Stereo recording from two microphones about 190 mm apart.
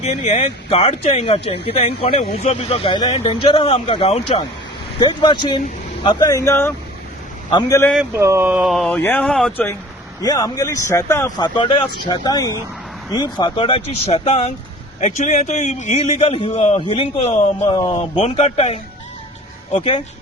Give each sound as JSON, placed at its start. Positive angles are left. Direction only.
{"t": 0.0, "sound": "speech", "side_deg": 35}
{"t": 8.1, "sound": "speech", "side_deg": -15}
{"t": 10.2, "sound": "a man's voice", "side_deg": 20}